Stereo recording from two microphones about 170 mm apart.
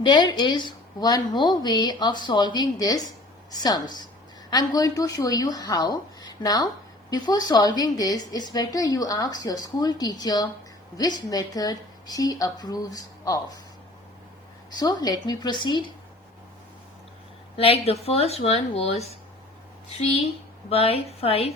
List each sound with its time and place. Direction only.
0.0 s a woman's voice: 25° left (ahead or behind)
14.8 s a woman's voice: 25° left (ahead or behind)
17.6 s speech: 35° left (ahead or behind)
20.7 s speech: 35° left (ahead or behind)